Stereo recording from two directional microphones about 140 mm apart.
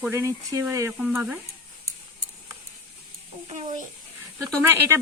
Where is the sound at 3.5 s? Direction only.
55° right (ahead or behind).